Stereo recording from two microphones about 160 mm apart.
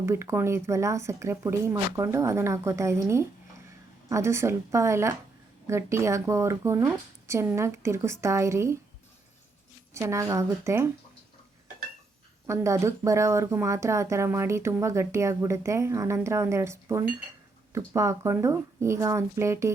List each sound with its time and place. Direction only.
0.0 s speech: 15° right (ahead or behind)
9.9 s speech: 20° right (ahead or behind)
12.5 s speech: 20° right (ahead or behind)